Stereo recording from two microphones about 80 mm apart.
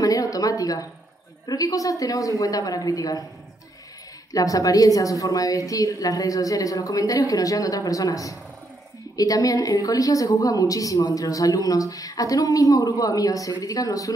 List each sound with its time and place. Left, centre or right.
0.0 s a sound: left
1.5 s a woman's voice: left
4.3 s a woman's voice: left